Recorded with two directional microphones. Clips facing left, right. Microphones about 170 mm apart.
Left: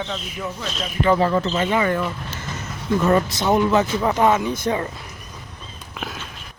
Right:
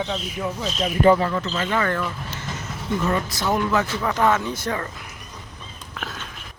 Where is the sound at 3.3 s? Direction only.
20° left (ahead or behind).